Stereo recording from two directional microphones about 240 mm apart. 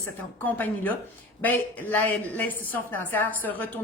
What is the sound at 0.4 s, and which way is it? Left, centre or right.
A woman's voice, centre.